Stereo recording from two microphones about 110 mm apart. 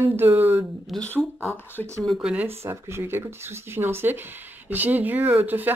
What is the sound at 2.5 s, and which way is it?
Speech, 25° right (ahead or behind).